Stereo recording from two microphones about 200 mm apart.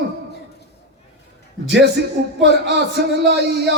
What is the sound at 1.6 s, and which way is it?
Speech, 60° right (ahead or behind).